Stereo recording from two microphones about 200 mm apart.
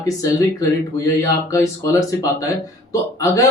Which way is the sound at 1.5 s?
15° left (ahead or behind).